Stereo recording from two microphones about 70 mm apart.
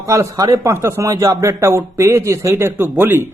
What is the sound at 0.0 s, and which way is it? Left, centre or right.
A man's voice, right.